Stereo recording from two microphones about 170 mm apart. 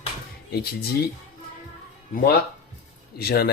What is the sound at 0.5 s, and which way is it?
Speech, 65° left (ahead or behind).